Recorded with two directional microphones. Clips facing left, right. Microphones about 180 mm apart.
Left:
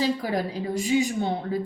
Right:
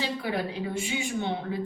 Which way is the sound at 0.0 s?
40° left (ahead or behind).